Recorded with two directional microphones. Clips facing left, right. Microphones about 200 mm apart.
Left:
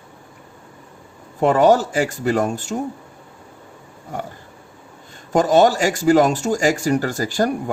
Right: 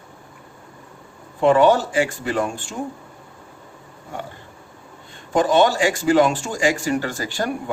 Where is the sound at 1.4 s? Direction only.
40° left (ahead or behind).